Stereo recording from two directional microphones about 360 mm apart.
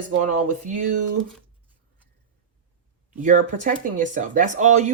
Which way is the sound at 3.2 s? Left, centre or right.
Right.